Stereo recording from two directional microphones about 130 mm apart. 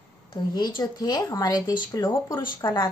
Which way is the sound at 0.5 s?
35° left (ahead or behind).